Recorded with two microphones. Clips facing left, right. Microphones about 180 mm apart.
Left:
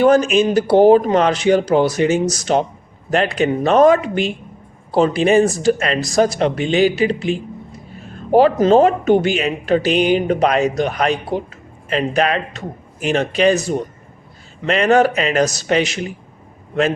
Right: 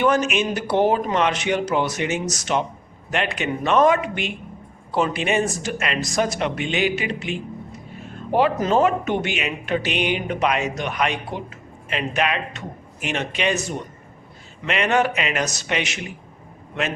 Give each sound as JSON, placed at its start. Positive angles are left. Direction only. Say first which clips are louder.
{"t": 0.0, "sound": "speech", "louder": "left 7 dB", "side_deg": 35}